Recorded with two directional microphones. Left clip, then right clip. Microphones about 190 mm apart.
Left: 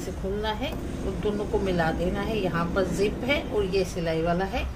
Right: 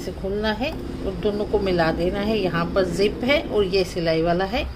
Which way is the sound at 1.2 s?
35° right (ahead or behind).